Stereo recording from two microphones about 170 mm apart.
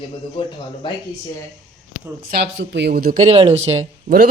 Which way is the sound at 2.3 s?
80° right.